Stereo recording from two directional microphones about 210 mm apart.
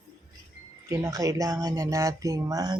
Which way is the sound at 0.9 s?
15° right (ahead or behind).